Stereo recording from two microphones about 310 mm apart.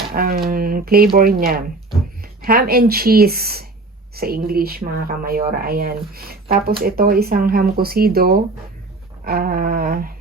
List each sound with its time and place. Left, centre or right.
0.1 s speech: right